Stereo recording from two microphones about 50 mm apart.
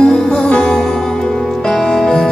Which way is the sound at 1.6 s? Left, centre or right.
Centre.